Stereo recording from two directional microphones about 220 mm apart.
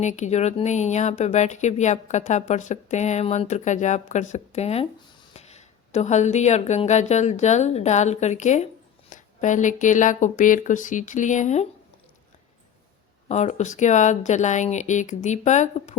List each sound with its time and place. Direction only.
0.0 s a woman's voice: 35° left (ahead or behind)
13.2 s speech: 30° left (ahead or behind)